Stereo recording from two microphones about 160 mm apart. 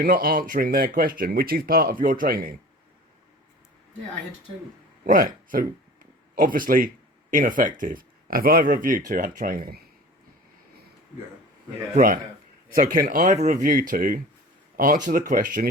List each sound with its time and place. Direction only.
0.0 s speech: 65° right (ahead or behind)
5.0 s speech: 60° right (ahead or behind)
11.9 s speech: 60° right (ahead or behind)